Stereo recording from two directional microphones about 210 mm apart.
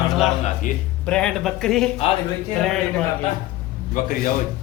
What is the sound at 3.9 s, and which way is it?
Speech, 40° left (ahead or behind).